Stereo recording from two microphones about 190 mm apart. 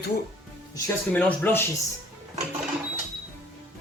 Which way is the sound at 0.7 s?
10° left (ahead or behind).